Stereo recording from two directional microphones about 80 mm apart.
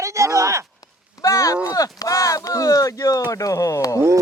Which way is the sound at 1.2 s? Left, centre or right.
Left.